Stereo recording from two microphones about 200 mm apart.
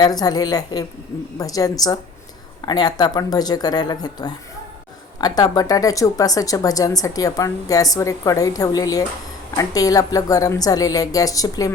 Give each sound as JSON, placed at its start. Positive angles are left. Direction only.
{"t": 0.0, "sound": "speech", "side_deg": 20}